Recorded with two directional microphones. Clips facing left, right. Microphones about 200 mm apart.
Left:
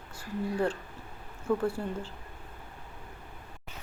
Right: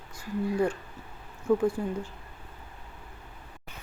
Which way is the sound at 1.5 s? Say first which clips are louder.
Right 4 dB; 15° right (ahead or behind).